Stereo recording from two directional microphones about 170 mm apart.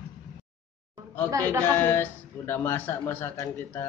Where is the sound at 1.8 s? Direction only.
15° left (ahead or behind).